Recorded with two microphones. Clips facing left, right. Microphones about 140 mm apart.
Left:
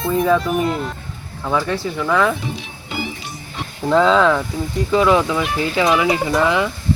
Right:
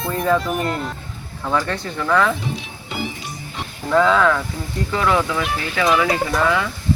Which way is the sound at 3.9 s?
20° left (ahead or behind).